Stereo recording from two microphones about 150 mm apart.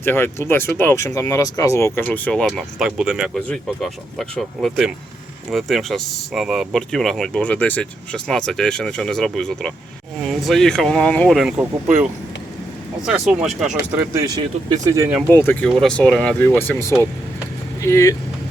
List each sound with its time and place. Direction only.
0.0 s speech: 15° left (ahead or behind); by 11.6 s centre (ahead or behind)
13.1 s speech: 5° right (ahead or behind)
13.9 s speech: 15° right (ahead or behind)
15.3 s speech: 15° left (ahead or behind)